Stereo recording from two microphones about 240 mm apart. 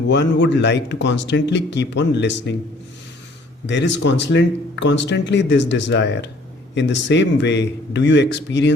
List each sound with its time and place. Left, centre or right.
0.1 s speech: left
3.7 s speech: left